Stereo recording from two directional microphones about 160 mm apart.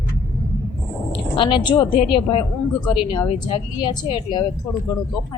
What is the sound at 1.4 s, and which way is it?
A woman's voice, 30° left (ahead or behind).